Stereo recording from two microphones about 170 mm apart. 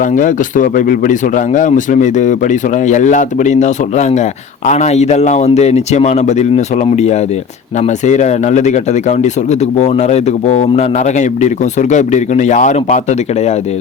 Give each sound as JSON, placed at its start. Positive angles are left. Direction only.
{"t": 0.0, "sound": "speech", "side_deg": 50}